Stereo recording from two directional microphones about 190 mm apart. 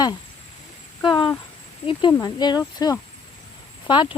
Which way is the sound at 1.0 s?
25° left (ahead or behind).